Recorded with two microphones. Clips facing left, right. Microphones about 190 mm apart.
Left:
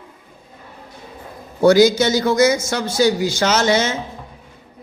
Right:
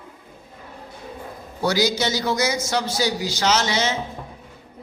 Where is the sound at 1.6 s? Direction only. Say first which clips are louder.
Left 9 dB; 50° left (ahead or behind).